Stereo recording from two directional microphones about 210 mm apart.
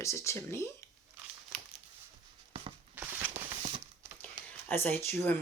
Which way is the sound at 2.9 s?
10° right (ahead or behind).